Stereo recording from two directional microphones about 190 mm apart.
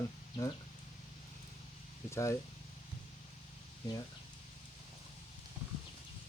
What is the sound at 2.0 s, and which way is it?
Speech, 15° left (ahead or behind).